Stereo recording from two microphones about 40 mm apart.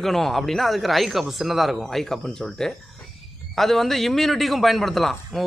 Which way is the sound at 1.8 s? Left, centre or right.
Centre.